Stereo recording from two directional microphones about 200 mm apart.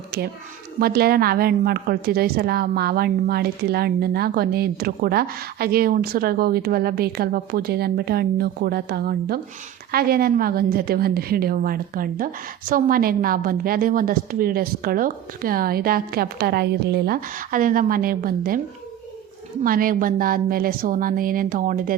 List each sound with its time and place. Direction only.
0.1 s a woman's voice: 50° right (ahead or behind)
19.6 s a woman's voice: 45° right (ahead or behind)